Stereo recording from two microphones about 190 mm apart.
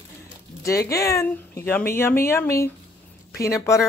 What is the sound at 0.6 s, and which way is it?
Speech, 15° left (ahead or behind).